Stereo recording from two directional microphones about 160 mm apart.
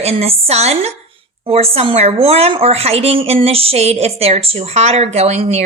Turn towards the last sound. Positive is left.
turn(degrees=-40)  # may be behind; listen again after turning